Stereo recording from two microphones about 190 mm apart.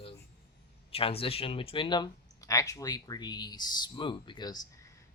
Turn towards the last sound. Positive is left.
turn(degrees=20)  # may be behind; listen again after turning